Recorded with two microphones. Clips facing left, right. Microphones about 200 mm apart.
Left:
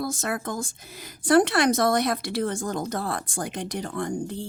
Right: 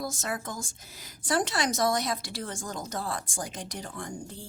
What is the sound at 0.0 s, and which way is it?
A woman's voice, 60° left (ahead or behind).